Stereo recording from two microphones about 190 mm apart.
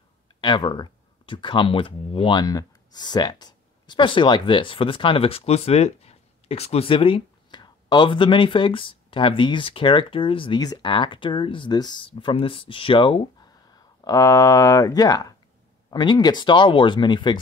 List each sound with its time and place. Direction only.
0.4 s speech: 25° left (ahead or behind)